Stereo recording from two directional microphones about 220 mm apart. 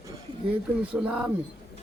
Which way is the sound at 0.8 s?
5° right (ahead or behind).